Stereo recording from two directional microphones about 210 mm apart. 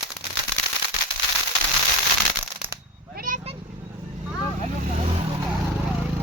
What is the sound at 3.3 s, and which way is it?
Vehicle, 40° right (ahead or behind).